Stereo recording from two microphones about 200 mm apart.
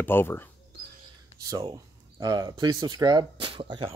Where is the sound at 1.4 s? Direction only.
20° right (ahead or behind).